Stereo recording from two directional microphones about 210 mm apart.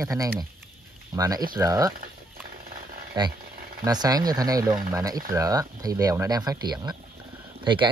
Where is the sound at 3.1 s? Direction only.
20° right (ahead or behind).